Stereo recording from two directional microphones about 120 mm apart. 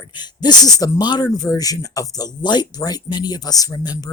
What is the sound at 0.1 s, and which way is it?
Speech, 35° left (ahead or behind).